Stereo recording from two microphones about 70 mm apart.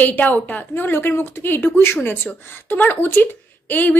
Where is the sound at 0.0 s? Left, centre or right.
Left.